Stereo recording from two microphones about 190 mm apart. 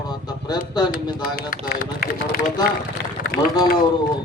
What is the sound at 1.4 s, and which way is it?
Speech, 50° left (ahead or behind).